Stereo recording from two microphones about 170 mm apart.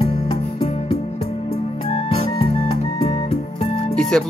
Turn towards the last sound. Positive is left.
turn(degrees=5)  # may be behind; listen again after turning